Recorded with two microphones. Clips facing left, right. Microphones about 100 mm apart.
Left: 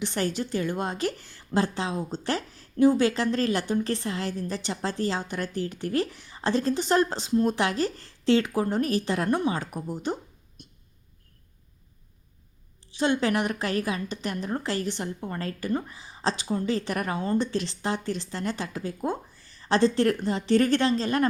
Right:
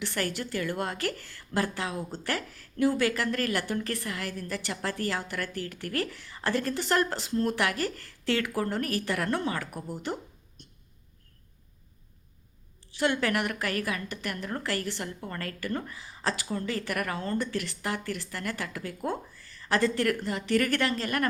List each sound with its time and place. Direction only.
0.0 s a woman's voice: 20° left (ahead or behind)
10.6 s a sound: 15° left (ahead or behind)
12.9 s a woman's voice: 20° left (ahead or behind)